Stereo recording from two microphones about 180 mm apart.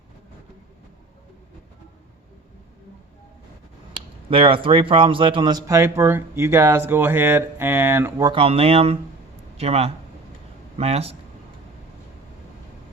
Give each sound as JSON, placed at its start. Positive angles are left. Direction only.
{"t": 4.3, "sound": "a man's voice", "side_deg": -30}
{"t": 8.3, "sound": "speech", "side_deg": -30}